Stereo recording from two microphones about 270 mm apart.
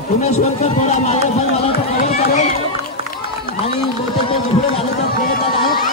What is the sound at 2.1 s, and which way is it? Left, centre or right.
Run, left.